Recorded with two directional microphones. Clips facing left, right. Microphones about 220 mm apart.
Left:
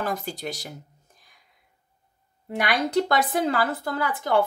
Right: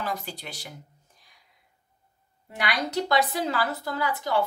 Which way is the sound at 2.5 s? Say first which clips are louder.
Left 5 dB; 50° left (ahead or behind).